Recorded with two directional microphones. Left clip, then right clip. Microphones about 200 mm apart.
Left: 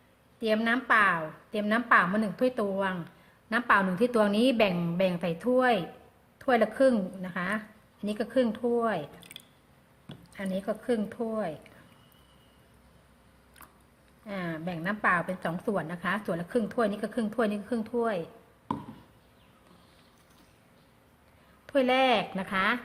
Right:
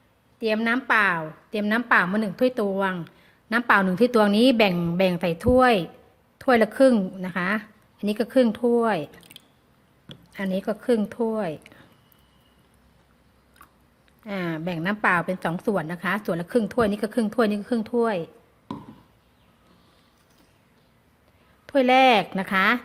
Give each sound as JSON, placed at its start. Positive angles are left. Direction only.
{"t": 0.3, "sound": "a woman's voice", "side_deg": -40}
{"t": 14.3, "sound": "a woman's voice", "side_deg": -50}
{"t": 21.7, "sound": "a woman's voice", "side_deg": -45}